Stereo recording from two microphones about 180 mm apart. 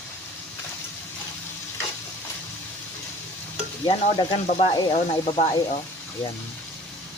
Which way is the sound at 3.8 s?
30° left (ahead or behind).